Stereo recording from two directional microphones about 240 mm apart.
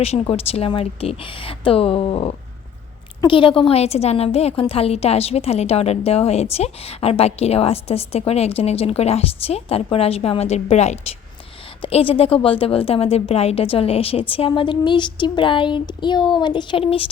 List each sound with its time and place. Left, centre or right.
0.0 s a woman's voice: left